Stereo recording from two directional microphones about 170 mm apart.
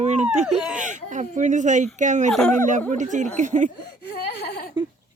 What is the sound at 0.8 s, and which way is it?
Speech, 45° right (ahead or behind).